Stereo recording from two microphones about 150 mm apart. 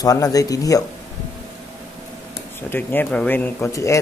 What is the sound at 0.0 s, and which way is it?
Speech, 25° left (ahead or behind).